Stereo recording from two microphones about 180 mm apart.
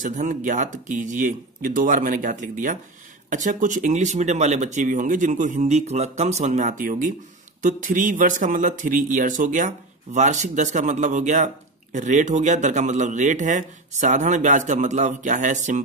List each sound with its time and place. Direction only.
0.0 s speech: 45° right (ahead or behind)